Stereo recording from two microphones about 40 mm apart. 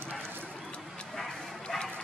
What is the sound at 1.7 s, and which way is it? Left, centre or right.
Dog, centre.